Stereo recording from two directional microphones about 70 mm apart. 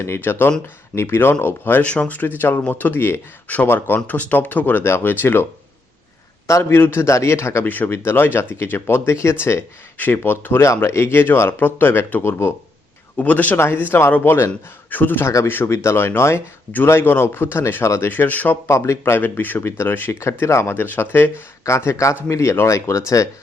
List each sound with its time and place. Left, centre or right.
0.0 s speech: left
1.8 s speech: centre
6.5 s speech: left
7.6 s speech: left
13.1 s speech: left
13.6 s speech: left
17.8 s speech: left
18.1 s speech: left
18.7 s speech: left
20.7 s speech: left